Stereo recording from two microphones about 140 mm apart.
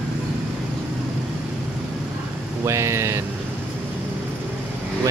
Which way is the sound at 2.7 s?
20° right (ahead or behind).